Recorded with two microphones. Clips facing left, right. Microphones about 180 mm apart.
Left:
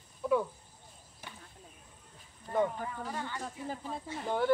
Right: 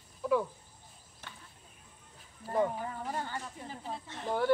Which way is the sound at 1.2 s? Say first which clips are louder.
Left 2 dB; 10° left (ahead or behind).